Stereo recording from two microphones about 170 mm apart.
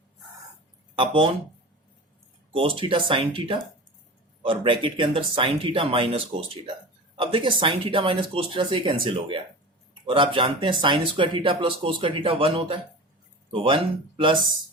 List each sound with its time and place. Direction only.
0.9 s speech: 30° right (ahead or behind)
2.5 s speech: 30° right (ahead or behind)